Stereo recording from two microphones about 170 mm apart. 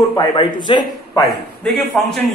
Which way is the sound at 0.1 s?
25° left (ahead or behind).